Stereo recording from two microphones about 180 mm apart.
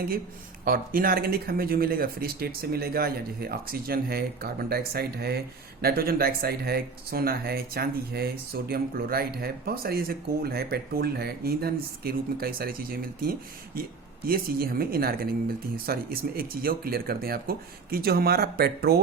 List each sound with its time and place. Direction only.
0.6 s speech: 55° right (ahead or behind)